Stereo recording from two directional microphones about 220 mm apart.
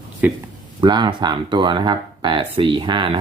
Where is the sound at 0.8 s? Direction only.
20° right (ahead or behind).